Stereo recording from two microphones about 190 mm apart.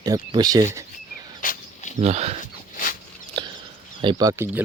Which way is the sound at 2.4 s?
45° left (ahead or behind).